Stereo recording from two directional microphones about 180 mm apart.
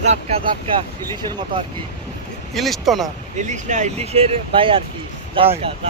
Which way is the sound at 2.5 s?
Centre (ahead or behind).